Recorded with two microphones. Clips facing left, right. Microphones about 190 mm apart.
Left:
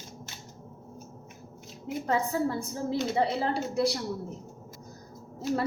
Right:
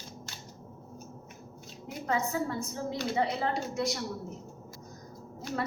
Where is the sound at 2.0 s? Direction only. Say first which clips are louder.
Left 3 dB; 30° left (ahead or behind).